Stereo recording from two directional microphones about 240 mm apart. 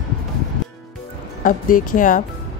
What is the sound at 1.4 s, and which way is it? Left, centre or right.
Speech, left.